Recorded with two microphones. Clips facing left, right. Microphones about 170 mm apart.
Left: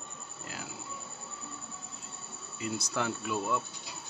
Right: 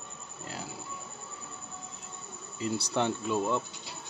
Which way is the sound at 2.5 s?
30° right (ahead or behind).